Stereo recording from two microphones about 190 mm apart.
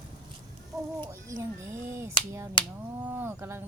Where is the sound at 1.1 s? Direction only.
15° right (ahead or behind).